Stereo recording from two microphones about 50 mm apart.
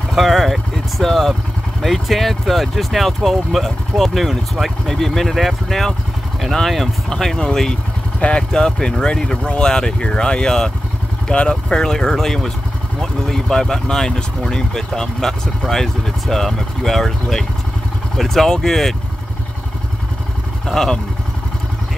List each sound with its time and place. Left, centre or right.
0.1 s speech: centre
20.6 s speech: centre